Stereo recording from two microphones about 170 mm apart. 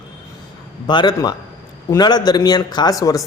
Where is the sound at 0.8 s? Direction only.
25° left (ahead or behind).